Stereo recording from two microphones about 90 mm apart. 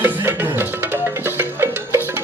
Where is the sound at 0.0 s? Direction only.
20° right (ahead or behind).